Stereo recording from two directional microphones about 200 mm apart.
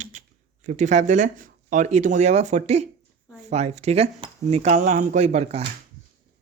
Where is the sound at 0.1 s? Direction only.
40° right (ahead or behind).